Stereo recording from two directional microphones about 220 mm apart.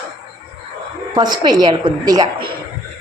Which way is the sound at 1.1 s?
20° right (ahead or behind).